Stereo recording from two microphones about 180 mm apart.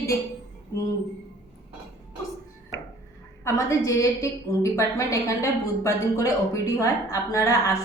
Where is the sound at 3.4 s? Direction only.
15° left (ahead or behind).